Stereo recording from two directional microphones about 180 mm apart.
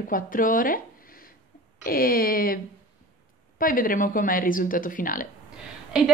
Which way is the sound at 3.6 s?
50° left (ahead or behind).